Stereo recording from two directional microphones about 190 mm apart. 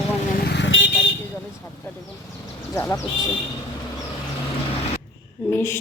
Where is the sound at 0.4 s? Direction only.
70° left (ahead or behind).